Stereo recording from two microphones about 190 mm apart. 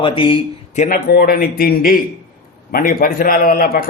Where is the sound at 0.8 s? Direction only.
50° left (ahead or behind).